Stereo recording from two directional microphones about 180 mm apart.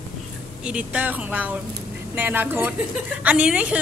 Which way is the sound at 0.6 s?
5° right (ahead or behind).